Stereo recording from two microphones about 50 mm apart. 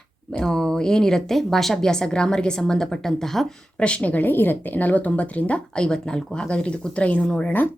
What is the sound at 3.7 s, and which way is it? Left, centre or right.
Speech, left.